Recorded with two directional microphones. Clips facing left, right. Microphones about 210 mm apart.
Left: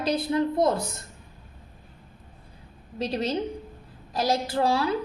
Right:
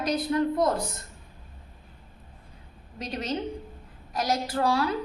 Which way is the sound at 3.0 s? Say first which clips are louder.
Left 4 dB; 30° left (ahead or behind).